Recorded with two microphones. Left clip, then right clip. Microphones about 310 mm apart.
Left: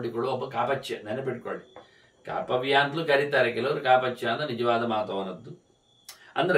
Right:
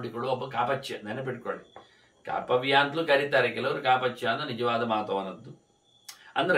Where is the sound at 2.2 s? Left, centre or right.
Centre.